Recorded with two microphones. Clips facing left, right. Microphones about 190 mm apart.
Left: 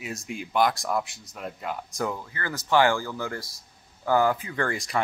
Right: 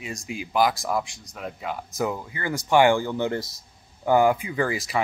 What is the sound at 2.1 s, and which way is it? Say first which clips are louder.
Speech: right 4 dB; 15° right (ahead or behind).